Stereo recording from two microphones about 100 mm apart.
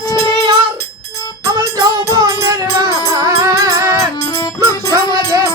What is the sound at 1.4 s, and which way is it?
Music, 30° right (ahead or behind).